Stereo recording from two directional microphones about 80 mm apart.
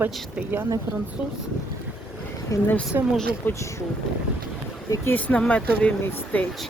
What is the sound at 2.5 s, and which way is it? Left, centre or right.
Speech, left.